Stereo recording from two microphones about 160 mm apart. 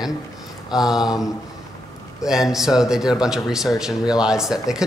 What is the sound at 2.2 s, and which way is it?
A man's voice, 5° right (ahead or behind).